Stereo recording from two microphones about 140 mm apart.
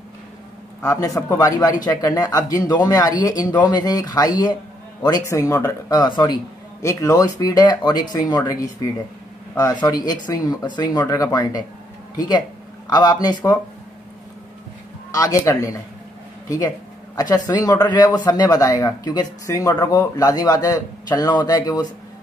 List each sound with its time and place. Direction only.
0.8 s speech: 25° left (ahead or behind)
15.0 s speech: 25° left (ahead or behind)